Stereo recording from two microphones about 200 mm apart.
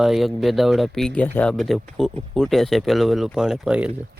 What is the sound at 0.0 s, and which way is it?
Speech, centre (ahead or behind).